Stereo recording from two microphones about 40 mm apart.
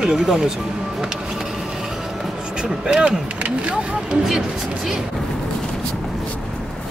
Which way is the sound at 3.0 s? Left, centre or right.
Right.